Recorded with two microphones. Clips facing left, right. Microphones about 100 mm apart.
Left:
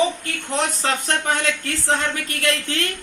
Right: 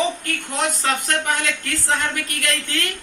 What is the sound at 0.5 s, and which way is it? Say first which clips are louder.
Speech: even; 30° left (ahead or behind).